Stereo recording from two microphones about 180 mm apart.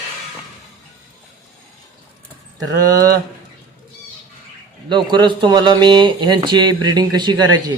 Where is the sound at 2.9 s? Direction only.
20° right (ahead or behind).